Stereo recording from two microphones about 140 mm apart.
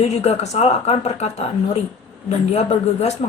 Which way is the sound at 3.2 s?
50° left (ahead or behind).